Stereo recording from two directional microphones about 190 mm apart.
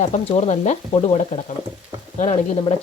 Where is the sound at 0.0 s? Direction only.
40° left (ahead or behind).